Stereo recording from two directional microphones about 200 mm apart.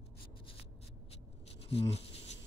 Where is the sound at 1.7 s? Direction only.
30° left (ahead or behind).